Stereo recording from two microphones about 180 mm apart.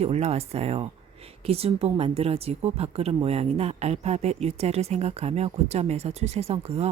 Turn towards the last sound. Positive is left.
turn(degrees=-35)  # may be behind; listen again after turning